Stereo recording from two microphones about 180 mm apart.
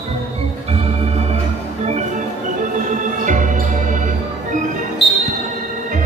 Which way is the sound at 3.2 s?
45° right (ahead or behind).